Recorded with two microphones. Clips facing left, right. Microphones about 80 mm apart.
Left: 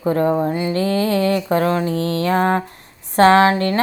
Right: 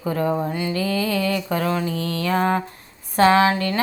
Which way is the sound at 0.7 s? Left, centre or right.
Left.